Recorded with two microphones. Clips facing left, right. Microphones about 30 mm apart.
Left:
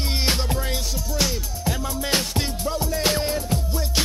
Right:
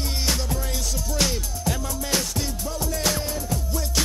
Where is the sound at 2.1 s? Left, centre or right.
Left.